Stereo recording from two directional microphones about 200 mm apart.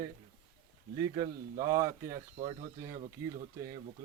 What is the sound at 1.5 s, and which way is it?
Speech, 15° right (ahead or behind).